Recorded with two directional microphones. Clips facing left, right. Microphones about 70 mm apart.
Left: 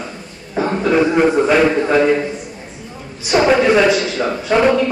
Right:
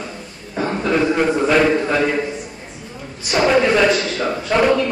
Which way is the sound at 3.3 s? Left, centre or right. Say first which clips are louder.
Left 3 dB; centre.